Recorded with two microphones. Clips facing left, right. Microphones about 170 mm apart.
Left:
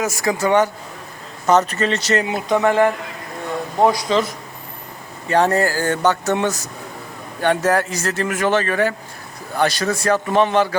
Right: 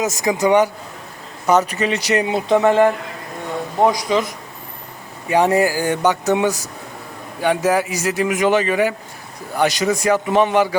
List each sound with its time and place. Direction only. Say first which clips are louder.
0.0 s a man's voice: right 2 dB; 20° right (ahead or behind)
2.2 s speech: right 2 dB; 25° right (ahead or behind)
3.9 s a man's voice: even; 15° right (ahead or behind)